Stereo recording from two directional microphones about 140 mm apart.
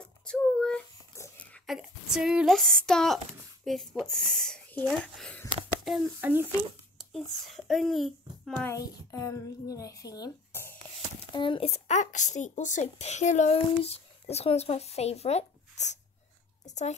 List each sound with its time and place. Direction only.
0.0 s a sound: 5° left (ahead or behind)
1.8 s a child's voice: 5° right (ahead or behind)
6.2 s speech: 15° right (ahead or behind)
7.0 s a child's voice: centre (ahead or behind)
8.5 s a child's voice: 20° left (ahead or behind)
10.5 s a sound: 15° left (ahead or behind)
11.3 s a child's voice: 35° left (ahead or behind); by 16.9 s 55° left (ahead or behind)